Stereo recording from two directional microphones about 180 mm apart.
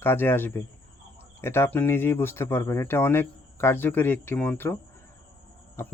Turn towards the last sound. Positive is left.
turn(degrees=10)  # may be behind; listen again after turning